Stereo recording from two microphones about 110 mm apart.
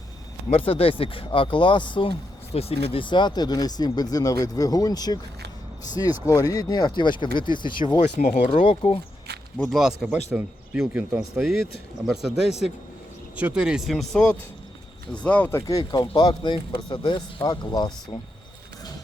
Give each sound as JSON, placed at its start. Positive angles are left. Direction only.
{"t": 0.5, "sound": "speech", "side_deg": 60}
{"t": 6.2, "sound": "speech", "side_deg": 30}
{"t": 8.0, "sound": "speech", "side_deg": 85}
{"t": 9.6, "sound": "speech", "side_deg": -5}
{"t": 15.6, "sound": "speech", "side_deg": 35}